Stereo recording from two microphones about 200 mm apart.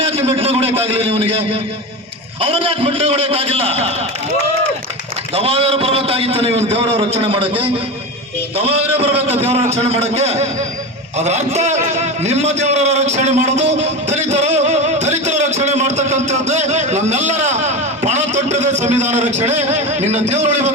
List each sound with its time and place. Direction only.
0.0 s a sound: 30° right (ahead or behind)
2.4 s a man's voice: 30° right (ahead or behind)
5.3 s a man's voice: 30° right (ahead or behind)
14.1 s music: 35° right (ahead or behind)